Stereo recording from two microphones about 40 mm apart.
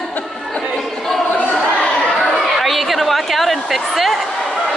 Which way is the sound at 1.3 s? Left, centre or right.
Left.